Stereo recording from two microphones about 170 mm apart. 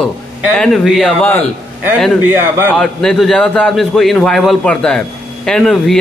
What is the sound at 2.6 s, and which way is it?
A man's voice, 5° left (ahead or behind).